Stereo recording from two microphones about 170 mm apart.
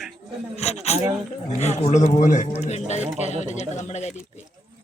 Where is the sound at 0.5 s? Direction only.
40° left (ahead or behind).